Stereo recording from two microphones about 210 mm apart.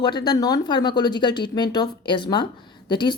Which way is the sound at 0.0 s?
20° left (ahead or behind).